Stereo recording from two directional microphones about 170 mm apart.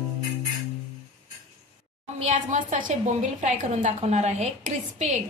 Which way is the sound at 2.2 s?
45° right (ahead or behind).